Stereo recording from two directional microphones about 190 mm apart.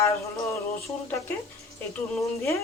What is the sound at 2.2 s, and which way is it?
Speech, 15° left (ahead or behind).